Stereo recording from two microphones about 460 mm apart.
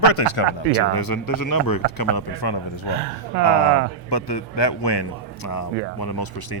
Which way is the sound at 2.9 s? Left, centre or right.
Right.